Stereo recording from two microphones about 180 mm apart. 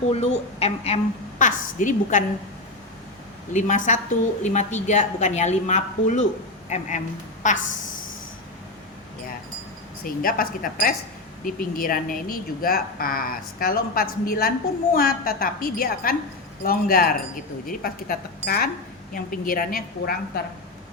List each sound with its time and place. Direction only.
0.1 s a woman's voice: 35° left (ahead or behind)
3.5 s a woman's voice: 40° left (ahead or behind)
10.0 s a woman's voice: 50° left (ahead or behind)